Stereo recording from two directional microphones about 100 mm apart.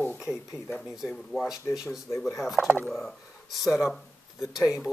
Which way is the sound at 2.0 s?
25° left (ahead or behind).